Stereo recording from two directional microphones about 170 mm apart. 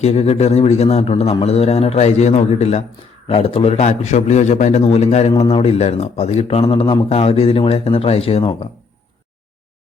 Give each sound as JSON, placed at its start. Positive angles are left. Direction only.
{"t": 0.0, "sound": "speech", "side_deg": 35}